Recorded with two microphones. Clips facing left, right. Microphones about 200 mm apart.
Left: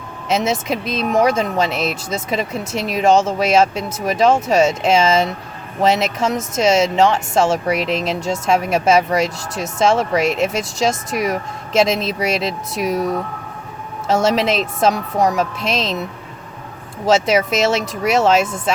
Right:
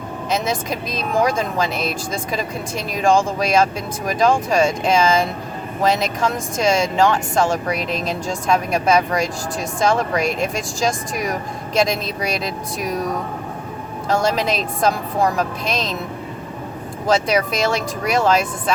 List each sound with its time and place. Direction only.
0.3 s speech: 25° left (ahead or behind)
14.1 s speech: 25° left (ahead or behind)
17.1 s speech: 25° left (ahead or behind)